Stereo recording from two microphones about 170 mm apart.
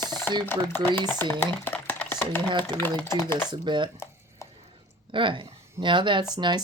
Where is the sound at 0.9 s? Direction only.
10° left (ahead or behind).